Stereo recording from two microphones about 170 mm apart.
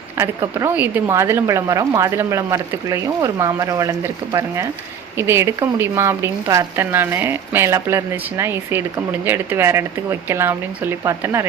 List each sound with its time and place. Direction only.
0.2 s speech: 10° right (ahead or behind)